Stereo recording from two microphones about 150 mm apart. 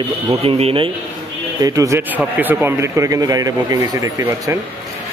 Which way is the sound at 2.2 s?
10° right (ahead or behind).